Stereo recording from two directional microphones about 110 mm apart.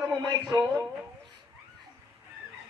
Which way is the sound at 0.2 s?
40° right (ahead or behind).